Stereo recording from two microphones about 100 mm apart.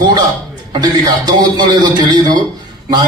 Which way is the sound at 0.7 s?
40° right (ahead or behind).